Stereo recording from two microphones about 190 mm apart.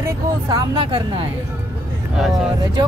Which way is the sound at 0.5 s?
25° right (ahead or behind).